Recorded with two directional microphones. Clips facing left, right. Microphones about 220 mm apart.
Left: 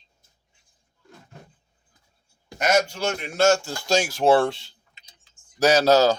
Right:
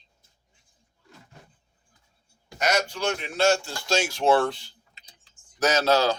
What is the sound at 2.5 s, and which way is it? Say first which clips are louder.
Speech: left 4 dB; 50° left (ahead or behind).